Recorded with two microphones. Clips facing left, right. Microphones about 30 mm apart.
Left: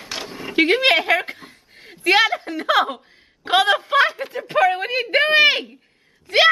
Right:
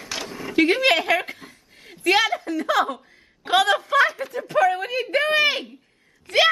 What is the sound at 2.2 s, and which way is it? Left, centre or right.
Speech, left.